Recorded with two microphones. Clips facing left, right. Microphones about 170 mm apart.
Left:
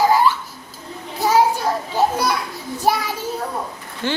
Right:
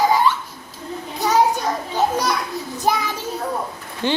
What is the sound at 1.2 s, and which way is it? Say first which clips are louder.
Children playing: left 1 dB; 5° left (ahead or behind).